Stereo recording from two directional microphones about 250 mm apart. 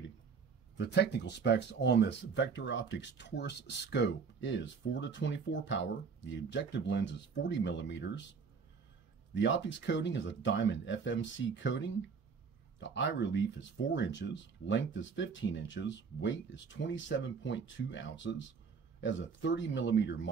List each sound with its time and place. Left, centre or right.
0.7 s speech: left
9.3 s speech: left